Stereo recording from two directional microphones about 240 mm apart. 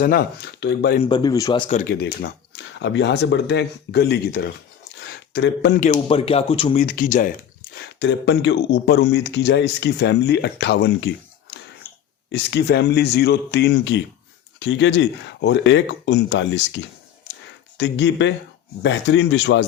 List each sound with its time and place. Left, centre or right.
0.0 s speech: left
1.0 s speech: centre
1.9 s speech: left
4.9 s a sound: left
5.8 s speech: left
6.8 s speech: left
7.8 s speech: left
12.3 s speech: left